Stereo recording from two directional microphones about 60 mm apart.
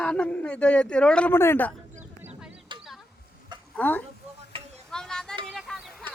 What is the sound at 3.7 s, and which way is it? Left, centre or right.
Speech, left.